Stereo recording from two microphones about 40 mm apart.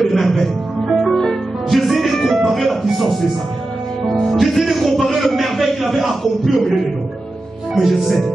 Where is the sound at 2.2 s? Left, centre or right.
Centre.